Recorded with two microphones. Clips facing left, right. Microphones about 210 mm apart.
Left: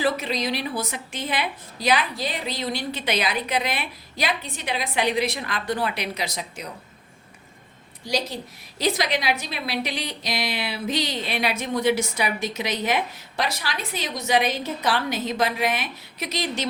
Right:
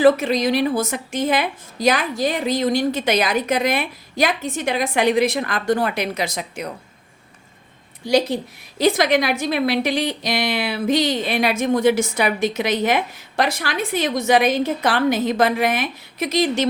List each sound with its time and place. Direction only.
0.0 s a woman's voice: 50° right (ahead or behind)
8.0 s a woman's voice: 60° right (ahead or behind)